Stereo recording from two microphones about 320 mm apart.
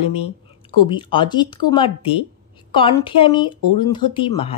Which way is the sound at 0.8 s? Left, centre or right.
Centre.